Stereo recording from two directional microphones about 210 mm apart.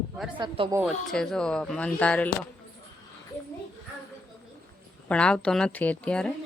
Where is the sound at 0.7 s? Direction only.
Centre (ahead or behind).